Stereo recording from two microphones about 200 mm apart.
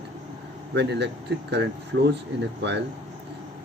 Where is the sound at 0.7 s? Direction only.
60° right (ahead or behind).